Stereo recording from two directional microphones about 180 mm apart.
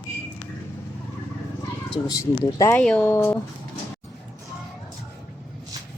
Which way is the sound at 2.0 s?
20° left (ahead or behind).